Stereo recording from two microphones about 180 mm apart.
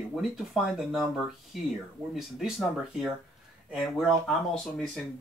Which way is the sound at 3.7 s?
Centre (ahead or behind).